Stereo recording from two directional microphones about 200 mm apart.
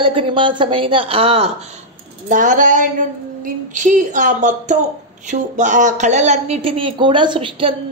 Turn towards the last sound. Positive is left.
turn(degrees=-25)  # may be behind; listen again after turning